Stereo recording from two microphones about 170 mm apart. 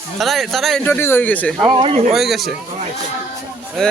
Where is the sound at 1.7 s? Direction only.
35° right (ahead or behind).